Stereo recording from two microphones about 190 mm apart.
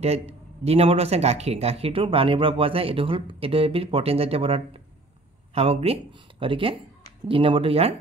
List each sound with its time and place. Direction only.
0.0 s speech: 35° right (ahead or behind)